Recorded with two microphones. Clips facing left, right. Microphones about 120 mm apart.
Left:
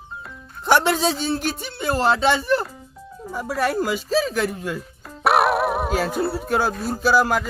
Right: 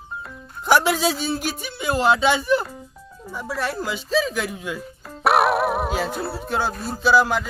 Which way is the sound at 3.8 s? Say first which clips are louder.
Left 2 dB; 5° left (ahead or behind).